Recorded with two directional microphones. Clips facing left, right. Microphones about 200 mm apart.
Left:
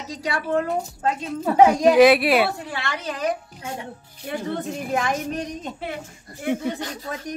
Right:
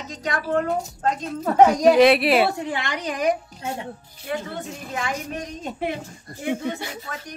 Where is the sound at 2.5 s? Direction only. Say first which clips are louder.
Right 3 dB; 20° right (ahead or behind).